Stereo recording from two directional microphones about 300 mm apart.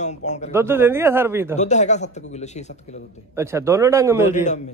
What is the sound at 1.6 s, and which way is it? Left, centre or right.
A man's voice, left.